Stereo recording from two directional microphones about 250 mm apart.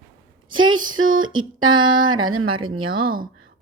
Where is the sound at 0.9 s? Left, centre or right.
Right.